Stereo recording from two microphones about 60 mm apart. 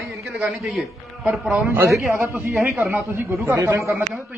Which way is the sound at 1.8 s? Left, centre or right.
Right.